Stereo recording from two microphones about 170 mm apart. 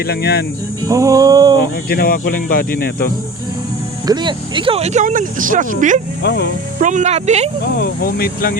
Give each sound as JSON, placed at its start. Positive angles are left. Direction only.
{"t": 0.0, "sound": "speech", "side_deg": 65}
{"t": 0.8, "sound": "music", "side_deg": -20}
{"t": 1.9, "sound": "speech", "side_deg": 60}
{"t": 4.0, "sound": "speech", "side_deg": -25}
{"t": 6.2, "sound": "speech", "side_deg": 80}
{"t": 6.7, "sound": "speech", "side_deg": -45}
{"t": 7.8, "sound": "speech", "side_deg": 60}